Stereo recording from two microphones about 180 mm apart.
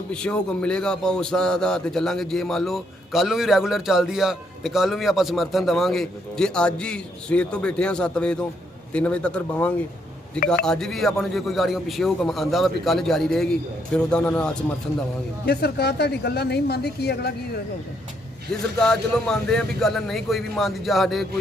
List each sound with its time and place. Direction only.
0.1 s a man's voice: 5° left (ahead or behind)
15.4 s speech: 65° left (ahead or behind)
18.8 s a man's voice: 5° left (ahead or behind)